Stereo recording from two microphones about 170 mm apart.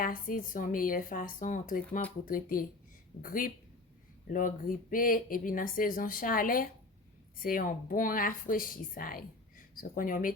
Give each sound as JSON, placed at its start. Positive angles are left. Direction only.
{"t": 0.0, "sound": "speech", "side_deg": 55}